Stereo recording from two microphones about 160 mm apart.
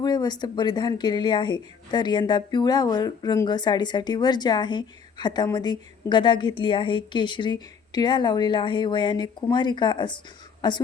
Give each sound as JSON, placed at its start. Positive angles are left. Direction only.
{"t": 0.0, "sound": "speech", "side_deg": 25}